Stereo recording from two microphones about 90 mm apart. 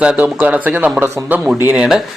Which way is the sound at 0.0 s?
10° right (ahead or behind).